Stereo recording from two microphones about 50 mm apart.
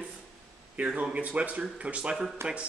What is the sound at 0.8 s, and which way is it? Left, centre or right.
Speech, right.